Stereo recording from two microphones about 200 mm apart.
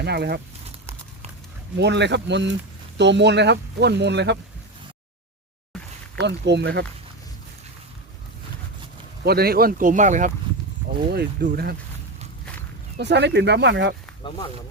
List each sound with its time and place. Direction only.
0.0 s speech: 55° right (ahead or behind)
1.7 s speech: 60° right (ahead or behind)
5.7 s a sound: 5° left (ahead or behind)
6.1 s speech: 60° right (ahead or behind)
9.2 s speech: 50° right (ahead or behind)
11.1 s speech: 50° right (ahead or behind)
13.0 s speech: 60° right (ahead or behind)